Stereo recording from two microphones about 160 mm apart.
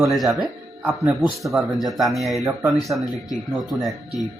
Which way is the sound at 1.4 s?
Centre (ahead or behind).